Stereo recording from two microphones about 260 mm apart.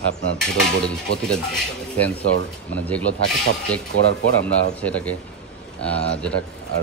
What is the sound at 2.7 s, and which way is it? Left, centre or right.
Cutlery, centre.